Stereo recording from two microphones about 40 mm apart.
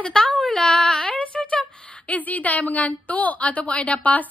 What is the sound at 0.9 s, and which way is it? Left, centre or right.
A woman's voice, left.